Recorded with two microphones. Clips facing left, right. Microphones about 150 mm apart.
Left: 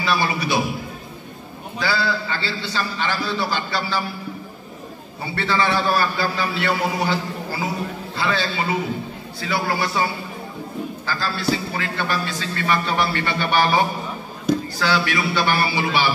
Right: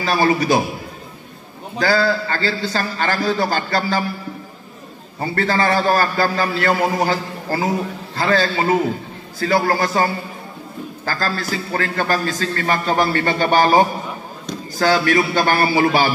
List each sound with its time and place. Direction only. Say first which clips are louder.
0.0 s a man's voice: right 5 dB; 45° right (ahead or behind)
1.8 s a man's voice: right 6 dB; 45° right (ahead or behind)
5.2 s a man's voice: right 3 dB; 45° right (ahead or behind)